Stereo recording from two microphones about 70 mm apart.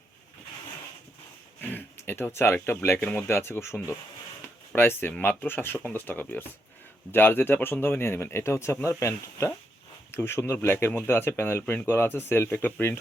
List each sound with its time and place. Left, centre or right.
1.6 s speech: left